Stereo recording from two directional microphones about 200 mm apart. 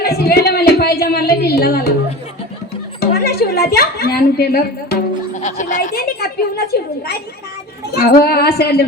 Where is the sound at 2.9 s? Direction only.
50° left (ahead or behind).